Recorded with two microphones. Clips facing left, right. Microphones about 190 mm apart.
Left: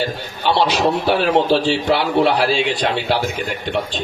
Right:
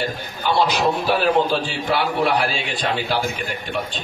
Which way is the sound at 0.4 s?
75° left (ahead or behind).